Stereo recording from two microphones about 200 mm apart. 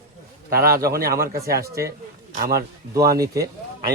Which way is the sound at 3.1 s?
15° right (ahead or behind).